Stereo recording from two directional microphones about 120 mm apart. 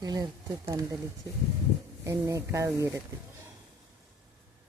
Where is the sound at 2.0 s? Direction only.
25° right (ahead or behind).